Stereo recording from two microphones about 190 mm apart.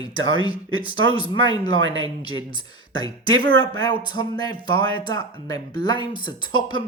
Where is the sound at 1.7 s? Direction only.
90° right.